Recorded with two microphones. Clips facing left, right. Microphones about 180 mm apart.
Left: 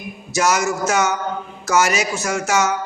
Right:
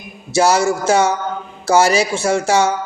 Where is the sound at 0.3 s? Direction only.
30° right (ahead or behind).